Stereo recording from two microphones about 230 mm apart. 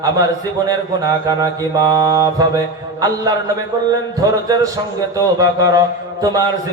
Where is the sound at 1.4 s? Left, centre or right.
Centre.